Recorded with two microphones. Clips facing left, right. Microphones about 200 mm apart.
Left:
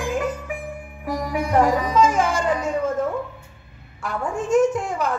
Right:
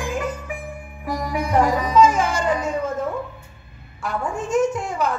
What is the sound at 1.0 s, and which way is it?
Music, 55° left (ahead or behind).